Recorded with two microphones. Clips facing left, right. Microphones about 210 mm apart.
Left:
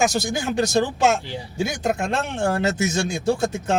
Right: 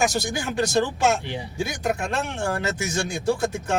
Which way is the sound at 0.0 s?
20° left (ahead or behind).